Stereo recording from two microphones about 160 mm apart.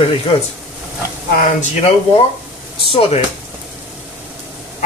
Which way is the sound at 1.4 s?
45° left (ahead or behind).